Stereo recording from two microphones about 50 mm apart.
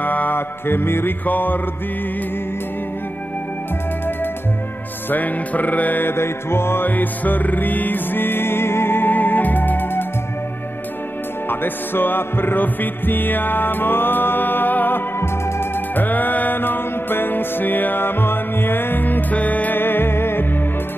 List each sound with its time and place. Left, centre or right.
0.0 s mantra: left
0.7 s music: left
1.2 s music: left
5.1 s music: left
6.1 s music: left
6.9 s music: left
11.4 s music: left
19.3 s music: left
19.8 s music: left